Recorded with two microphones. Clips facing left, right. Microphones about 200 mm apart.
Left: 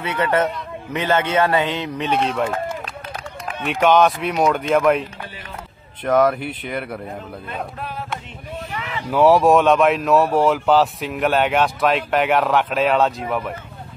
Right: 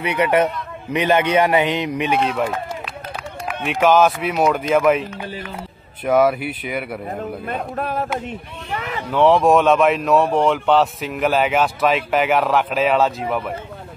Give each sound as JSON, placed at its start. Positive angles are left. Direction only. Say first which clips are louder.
{"t": 0.0, "sound": "a man's voice", "louder": "right 2 dB", "side_deg": -15}
{"t": 3.6, "sound": "speech", "louder": "even", "side_deg": 0}
{"t": 6.0, "sound": "a man's voice", "louder": "right 1 dB", "side_deg": -5}
{"t": 7.7, "sound": "speech", "louder": "right 7 dB", "side_deg": -50}
{"t": 9.1, "sound": "speech", "louder": "left 1 dB", "side_deg": 5}